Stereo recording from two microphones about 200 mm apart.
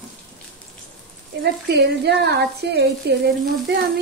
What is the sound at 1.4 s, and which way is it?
Speech, 55° right (ahead or behind).